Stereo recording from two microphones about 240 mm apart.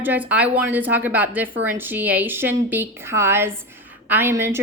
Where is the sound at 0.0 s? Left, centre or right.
Centre.